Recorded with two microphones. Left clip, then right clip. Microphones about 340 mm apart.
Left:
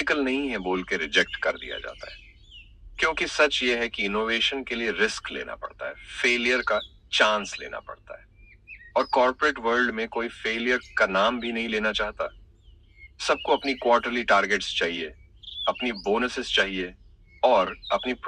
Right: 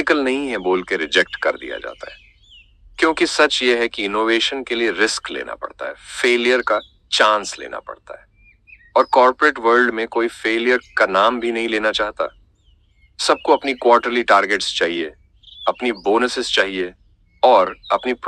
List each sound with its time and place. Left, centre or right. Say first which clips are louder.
0.0 s speech: right 7 dB; right
2.5 s chirp: right 1 dB; centre
3.0 s speech: right 7 dB; right